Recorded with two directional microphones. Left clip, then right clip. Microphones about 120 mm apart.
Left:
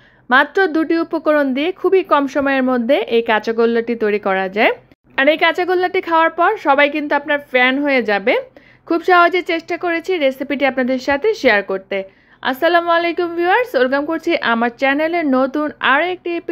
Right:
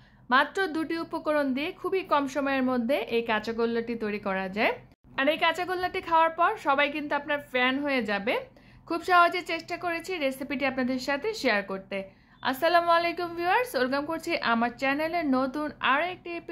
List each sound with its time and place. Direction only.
0.3 s speech: 35° left (ahead or behind)